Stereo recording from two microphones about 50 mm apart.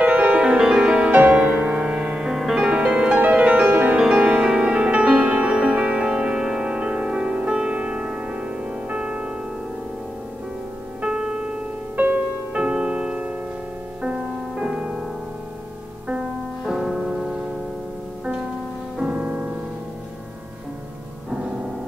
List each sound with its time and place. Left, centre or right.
0.0 s music: right
0.4 s music: centre
1.9 s music: centre
2.7 s music: centre
3.2 s music: right
3.9 s music: centre
11.0 s music: centre
12.5 s music: right
14.6 s music: centre
16.8 s music: centre
18.9 s music: right